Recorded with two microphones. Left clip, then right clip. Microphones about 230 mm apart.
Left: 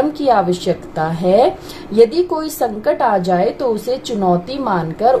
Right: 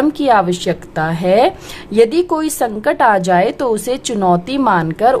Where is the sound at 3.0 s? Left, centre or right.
Right.